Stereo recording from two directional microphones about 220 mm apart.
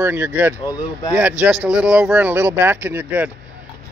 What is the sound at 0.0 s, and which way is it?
Speech, 10° right (ahead or behind).